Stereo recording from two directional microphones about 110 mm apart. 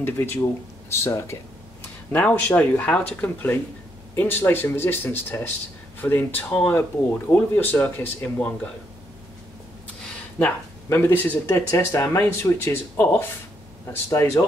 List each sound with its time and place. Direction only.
0.0 s speech: 20° left (ahead or behind)
2.1 s speech: 15° left (ahead or behind)
10.9 s speech: 20° left (ahead or behind)
11.7 s speech: 25° left (ahead or behind)